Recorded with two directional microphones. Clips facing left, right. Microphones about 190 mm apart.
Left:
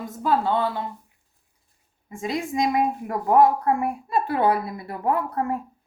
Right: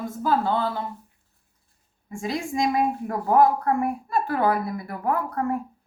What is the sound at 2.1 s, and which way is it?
A woman's voice, 20° left (ahead or behind).